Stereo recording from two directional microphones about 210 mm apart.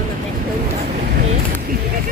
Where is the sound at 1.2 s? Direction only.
35° right (ahead or behind).